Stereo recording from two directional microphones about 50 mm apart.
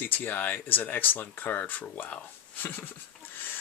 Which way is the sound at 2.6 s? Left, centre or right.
Left.